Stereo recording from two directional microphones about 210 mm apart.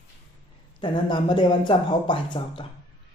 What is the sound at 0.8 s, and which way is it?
A woman's voice, 20° left (ahead or behind).